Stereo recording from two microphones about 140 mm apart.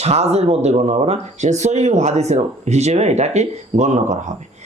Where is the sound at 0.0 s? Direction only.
50° right (ahead or behind).